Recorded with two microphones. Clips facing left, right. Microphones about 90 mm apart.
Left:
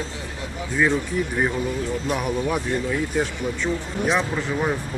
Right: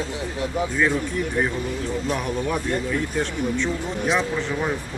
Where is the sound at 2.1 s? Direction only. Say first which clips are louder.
Left 2 dB; 5° left (ahead or behind).